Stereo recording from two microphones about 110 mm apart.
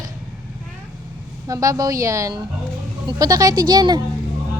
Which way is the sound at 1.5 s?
30° right (ahead or behind).